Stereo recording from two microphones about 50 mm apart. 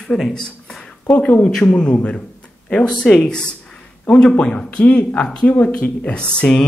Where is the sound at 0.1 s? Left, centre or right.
Centre.